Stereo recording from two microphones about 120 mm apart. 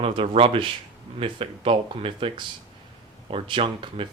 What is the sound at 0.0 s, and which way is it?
Speech, 50° right (ahead or behind).